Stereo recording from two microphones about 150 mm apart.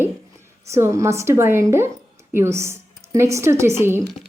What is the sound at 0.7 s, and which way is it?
A woman's voice, 20° right (ahead or behind).